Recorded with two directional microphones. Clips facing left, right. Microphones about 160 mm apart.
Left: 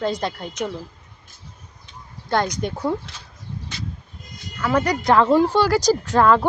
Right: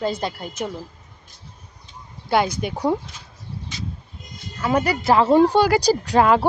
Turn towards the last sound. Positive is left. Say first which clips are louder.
# even
turn(degrees=-15)  # may be behind; listen again after turning